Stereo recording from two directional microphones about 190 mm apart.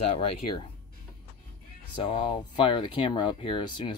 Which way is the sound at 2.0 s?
30° left (ahead or behind).